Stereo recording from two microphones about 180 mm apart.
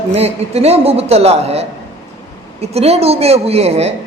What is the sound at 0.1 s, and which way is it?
A man's voice, 35° right (ahead or behind).